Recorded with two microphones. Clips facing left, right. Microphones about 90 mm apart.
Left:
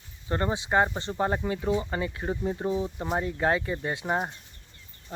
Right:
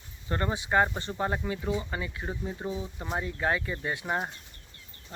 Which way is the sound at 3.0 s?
20° left (ahead or behind).